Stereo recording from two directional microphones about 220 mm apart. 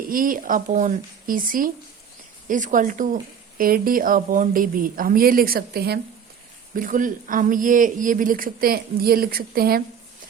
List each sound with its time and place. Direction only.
0.1 s speech: 40° right (ahead or behind)